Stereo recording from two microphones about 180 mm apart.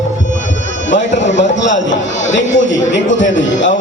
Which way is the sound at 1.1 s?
85° left.